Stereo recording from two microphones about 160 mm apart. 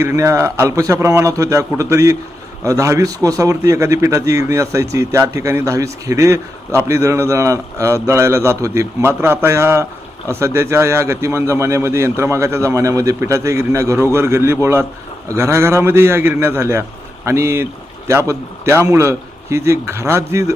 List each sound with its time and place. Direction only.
0.0 s a man's voice: 15° right (ahead or behind)